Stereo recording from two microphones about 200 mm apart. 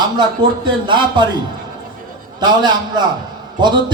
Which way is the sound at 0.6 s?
25° right (ahead or behind).